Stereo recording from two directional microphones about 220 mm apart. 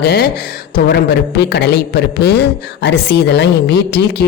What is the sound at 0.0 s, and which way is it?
A man's voice, 45° left (ahead or behind).